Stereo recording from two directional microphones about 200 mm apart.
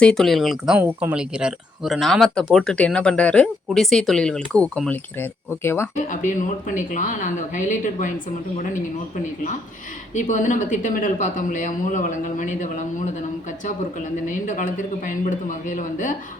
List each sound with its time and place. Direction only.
0.0 s speech: 5° left (ahead or behind)
6.1 s speech: 40° left (ahead or behind)
10.2 s speech: 40° left (ahead or behind)
14.3 s speech: 40° left (ahead or behind)